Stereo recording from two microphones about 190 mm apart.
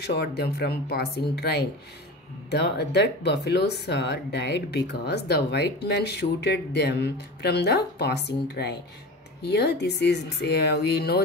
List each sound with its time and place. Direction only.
0.0 s speech: 60° left (ahead or behind)